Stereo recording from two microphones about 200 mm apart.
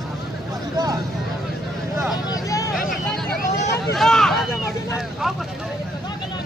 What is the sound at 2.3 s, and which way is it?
Vehicle, 15° left (ahead or behind).